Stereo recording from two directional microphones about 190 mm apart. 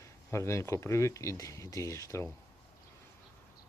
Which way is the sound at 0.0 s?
15° left (ahead or behind).